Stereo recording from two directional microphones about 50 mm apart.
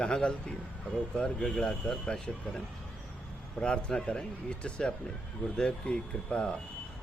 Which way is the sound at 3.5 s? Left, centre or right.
Centre.